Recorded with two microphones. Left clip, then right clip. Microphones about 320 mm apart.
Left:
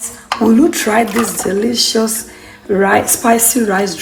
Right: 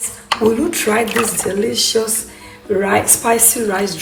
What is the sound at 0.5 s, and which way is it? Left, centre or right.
Speech, left.